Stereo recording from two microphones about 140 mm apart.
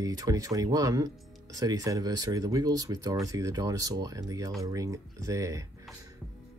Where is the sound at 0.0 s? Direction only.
25° right (ahead or behind).